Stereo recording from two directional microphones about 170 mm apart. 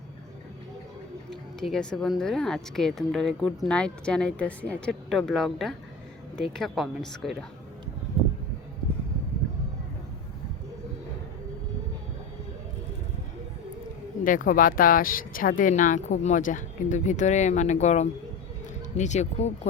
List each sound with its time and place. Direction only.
1.3 s speech: centre (ahead or behind)
14.3 s speech: 55° left (ahead or behind)